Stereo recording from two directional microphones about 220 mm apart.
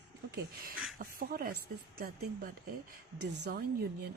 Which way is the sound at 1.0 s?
40° right (ahead or behind).